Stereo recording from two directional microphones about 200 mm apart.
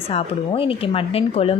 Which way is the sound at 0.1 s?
30° left (ahead or behind).